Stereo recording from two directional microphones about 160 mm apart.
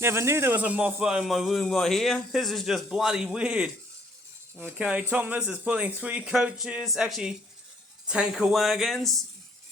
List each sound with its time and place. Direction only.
0.0 s a man's voice: 15° right (ahead or behind); by 9.2 s centre (ahead or behind)